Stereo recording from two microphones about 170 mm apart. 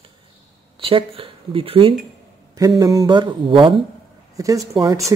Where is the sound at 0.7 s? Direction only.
30° right (ahead or behind).